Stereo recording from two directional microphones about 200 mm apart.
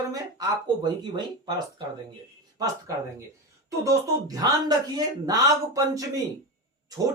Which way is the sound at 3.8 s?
15° right (ahead or behind).